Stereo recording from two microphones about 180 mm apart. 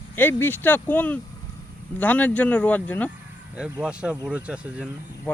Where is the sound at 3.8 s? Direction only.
5° right (ahead or behind).